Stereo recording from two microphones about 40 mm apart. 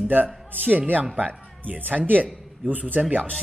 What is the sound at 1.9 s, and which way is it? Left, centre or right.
Speech, centre.